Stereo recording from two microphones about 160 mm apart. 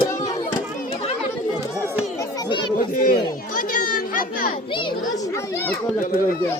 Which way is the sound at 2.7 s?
60° left (ahead or behind).